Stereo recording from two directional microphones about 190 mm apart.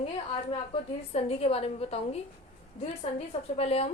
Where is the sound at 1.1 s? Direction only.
30° left (ahead or behind).